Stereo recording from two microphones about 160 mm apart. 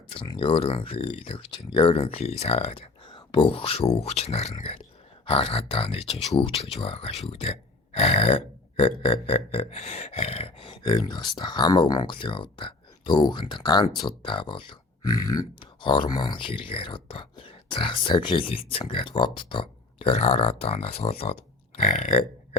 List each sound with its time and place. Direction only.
0.1 s speech: 35° left (ahead or behind)
21.8 s speech: 50° left (ahead or behind)